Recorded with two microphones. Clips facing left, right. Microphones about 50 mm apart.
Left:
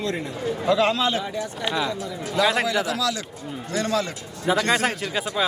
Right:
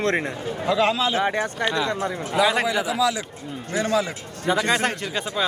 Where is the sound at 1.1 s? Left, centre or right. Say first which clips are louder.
Right 5 dB; right.